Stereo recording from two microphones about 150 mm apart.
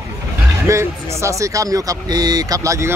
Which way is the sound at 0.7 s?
20° right (ahead or behind).